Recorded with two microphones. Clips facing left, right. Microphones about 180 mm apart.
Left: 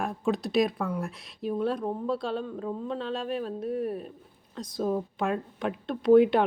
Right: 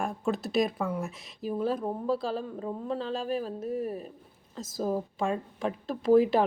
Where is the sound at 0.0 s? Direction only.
Centre (ahead or behind).